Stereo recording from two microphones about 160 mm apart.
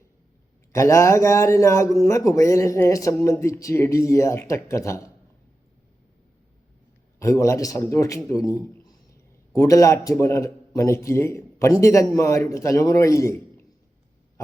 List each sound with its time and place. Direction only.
0.7 s a man's voice: 20° left (ahead or behind)
7.2 s a man's voice: 20° left (ahead or behind)